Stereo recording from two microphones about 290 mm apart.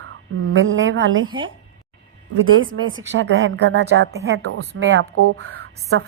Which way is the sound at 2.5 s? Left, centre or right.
Right.